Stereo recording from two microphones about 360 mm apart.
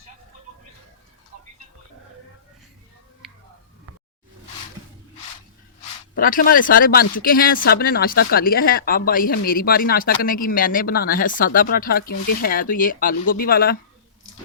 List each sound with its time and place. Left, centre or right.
3.2 s music: centre
6.1 s speech: left